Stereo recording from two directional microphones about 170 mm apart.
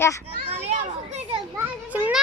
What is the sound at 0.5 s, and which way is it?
Speech, 40° right (ahead or behind).